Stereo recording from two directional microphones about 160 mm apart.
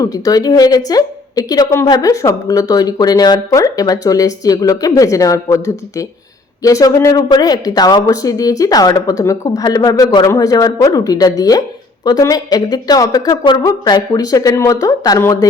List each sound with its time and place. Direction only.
0.0 s a woman's voice: 25° left (ahead or behind)